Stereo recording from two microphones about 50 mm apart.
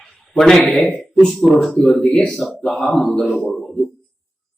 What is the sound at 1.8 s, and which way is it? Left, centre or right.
Speech, centre.